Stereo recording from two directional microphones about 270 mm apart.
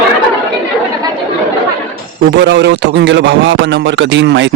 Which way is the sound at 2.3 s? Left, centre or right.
Right.